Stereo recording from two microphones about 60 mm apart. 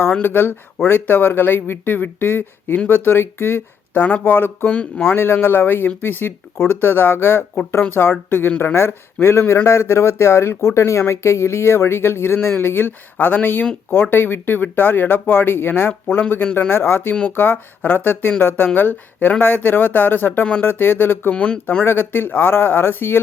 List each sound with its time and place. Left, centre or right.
0.0 s speech: left
21.3 s speech: centre
21.8 s speech: left